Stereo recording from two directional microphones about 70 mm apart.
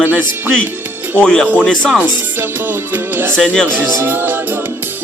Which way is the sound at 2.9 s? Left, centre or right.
Right.